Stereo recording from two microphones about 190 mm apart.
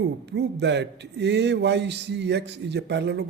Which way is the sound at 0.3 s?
65° right (ahead or behind).